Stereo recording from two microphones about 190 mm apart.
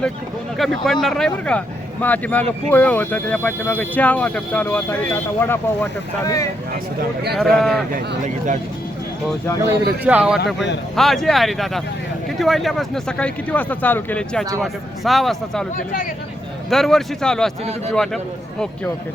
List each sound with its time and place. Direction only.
0.5 s speech: centre (ahead or behind); by 6.5 s 15° left (ahead or behind)
7.3 s speech: centre (ahead or behind)
7.9 s speech: 40° right (ahead or behind)
10.0 s speech: 5° right (ahead or behind)
16.6 s speech: centre (ahead or behind)